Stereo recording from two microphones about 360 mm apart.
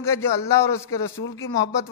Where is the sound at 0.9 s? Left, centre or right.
Left.